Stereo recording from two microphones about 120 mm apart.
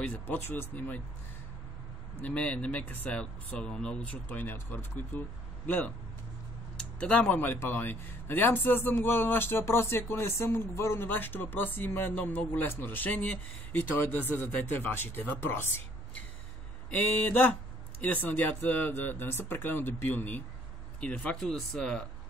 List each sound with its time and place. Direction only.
0.0 s speech: 15° left (ahead or behind)
2.2 s speech: 10° left (ahead or behind)
16.9 s speech: 15° left (ahead or behind)